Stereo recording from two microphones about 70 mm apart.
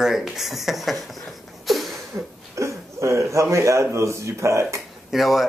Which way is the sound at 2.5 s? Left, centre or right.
Right.